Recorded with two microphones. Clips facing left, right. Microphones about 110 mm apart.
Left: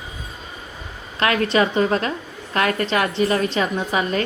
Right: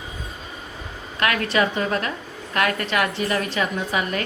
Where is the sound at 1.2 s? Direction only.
25° left (ahead or behind).